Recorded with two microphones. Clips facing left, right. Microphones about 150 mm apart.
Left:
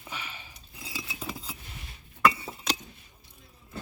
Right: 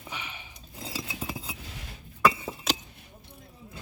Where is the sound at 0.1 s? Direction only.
15° right (ahead or behind).